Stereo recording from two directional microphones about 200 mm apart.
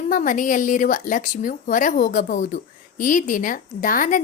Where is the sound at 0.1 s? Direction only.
40° left (ahead or behind).